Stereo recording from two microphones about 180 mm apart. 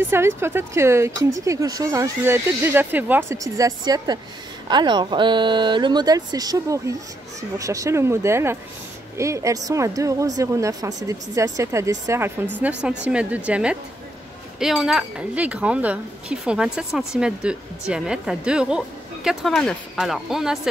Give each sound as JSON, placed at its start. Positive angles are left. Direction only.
{"t": 0.0, "sound": "speech", "side_deg": -15}